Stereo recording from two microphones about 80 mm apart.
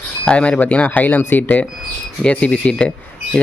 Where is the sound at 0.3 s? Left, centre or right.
Centre.